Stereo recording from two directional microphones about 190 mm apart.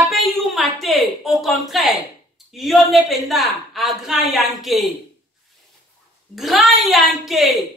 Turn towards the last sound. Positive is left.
turn(degrees=0)  # may be behind; listen again after turning